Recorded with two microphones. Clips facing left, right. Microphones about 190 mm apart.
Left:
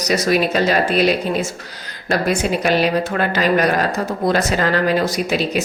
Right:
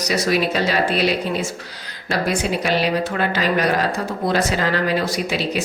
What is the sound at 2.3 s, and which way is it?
Speech, 50° left (ahead or behind).